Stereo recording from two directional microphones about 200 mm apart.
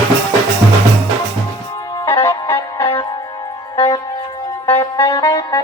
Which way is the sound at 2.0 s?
10° left (ahead or behind).